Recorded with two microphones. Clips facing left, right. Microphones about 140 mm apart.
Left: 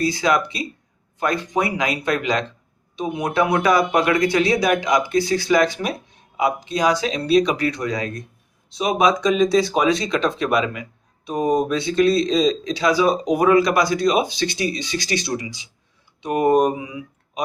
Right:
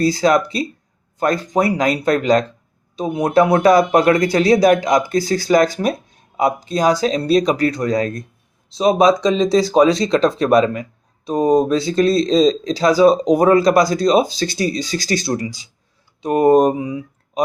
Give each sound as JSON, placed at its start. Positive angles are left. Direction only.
{"t": 0.0, "sound": "speech", "side_deg": -40}